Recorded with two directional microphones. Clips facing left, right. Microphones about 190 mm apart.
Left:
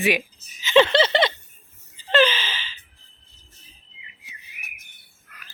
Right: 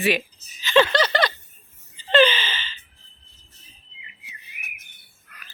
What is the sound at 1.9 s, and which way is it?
Gasp, 5° left (ahead or behind).